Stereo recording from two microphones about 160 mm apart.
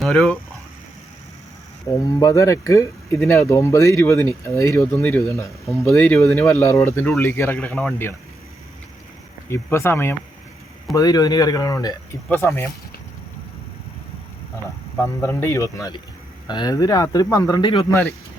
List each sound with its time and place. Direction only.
0.0 s speech: centre (ahead or behind)
2.1 s speech: 20° left (ahead or behind)
9.5 s speech: 15° left (ahead or behind)
14.9 s speech: 15° left (ahead or behind)